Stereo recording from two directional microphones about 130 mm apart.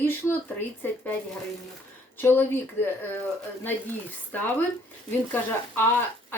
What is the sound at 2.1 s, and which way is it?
Speech, 15° left (ahead or behind).